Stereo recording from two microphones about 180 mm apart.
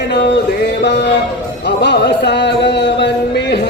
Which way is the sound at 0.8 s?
70° left (ahead or behind).